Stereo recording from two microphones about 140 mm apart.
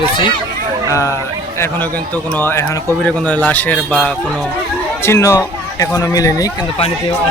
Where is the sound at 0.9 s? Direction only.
20° left (ahead or behind).